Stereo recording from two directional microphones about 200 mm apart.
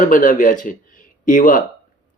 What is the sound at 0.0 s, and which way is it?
Speech, 40° left (ahead or behind).